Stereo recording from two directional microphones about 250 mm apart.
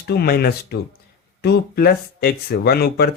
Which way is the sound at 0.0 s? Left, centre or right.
Left.